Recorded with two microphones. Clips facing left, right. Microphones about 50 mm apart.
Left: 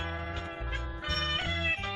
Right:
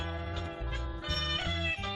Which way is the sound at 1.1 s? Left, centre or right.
Left.